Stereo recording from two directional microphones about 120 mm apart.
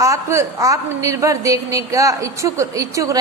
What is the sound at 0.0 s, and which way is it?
A woman's voice, 25° right (ahead or behind).